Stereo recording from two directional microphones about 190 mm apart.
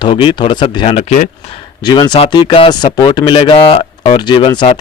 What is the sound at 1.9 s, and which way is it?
Speech, 20° left (ahead or behind).